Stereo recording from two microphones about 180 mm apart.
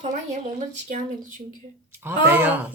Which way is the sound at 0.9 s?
45° right (ahead or behind).